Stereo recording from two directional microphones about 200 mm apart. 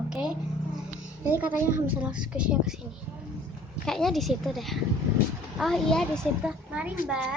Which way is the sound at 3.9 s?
Centre (ahead or behind).